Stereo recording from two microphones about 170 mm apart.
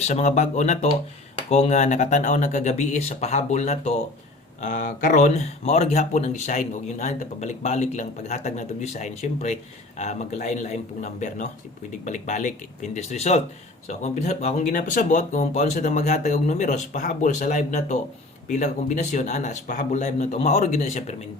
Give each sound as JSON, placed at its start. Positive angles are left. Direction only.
{"t": 0.0, "sound": "speech", "side_deg": 40}
{"t": 4.6, "sound": "speech", "side_deg": 50}